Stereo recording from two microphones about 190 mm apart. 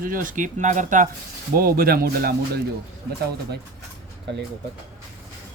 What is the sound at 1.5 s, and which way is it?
Speech, 50° right (ahead or behind).